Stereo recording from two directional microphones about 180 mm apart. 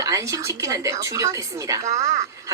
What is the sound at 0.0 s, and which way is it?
Speech, 20° right (ahead or behind).